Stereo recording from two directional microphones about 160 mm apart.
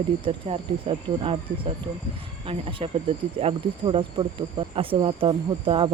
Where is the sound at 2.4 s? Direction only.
35° right (ahead or behind).